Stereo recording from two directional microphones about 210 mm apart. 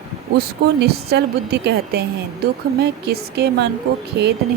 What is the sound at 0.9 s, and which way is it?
A woman's voice, 50° right (ahead or behind).